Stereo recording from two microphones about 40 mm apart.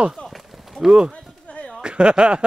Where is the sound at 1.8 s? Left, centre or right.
Right.